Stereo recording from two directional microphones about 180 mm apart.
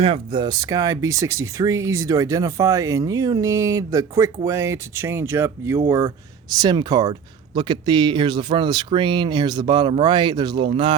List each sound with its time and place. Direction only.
0.0 s speech: 30° right (ahead or behind)